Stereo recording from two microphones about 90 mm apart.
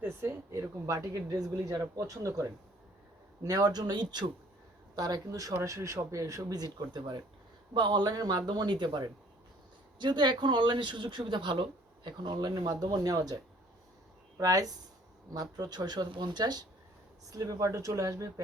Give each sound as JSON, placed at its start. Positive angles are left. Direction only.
{"t": 0.0, "sound": "speech", "side_deg": -30}
{"t": 3.4, "sound": "speech", "side_deg": -50}
{"t": 4.9, "sound": "speech", "side_deg": -45}